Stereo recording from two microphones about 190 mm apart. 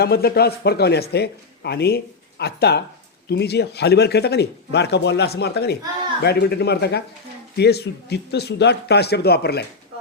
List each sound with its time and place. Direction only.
0.0 s speech: 55° left (ahead or behind)